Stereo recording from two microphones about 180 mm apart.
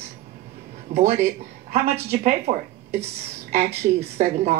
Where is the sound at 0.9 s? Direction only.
35° right (ahead or behind).